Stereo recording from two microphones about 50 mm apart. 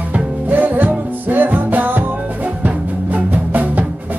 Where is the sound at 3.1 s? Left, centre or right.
Right.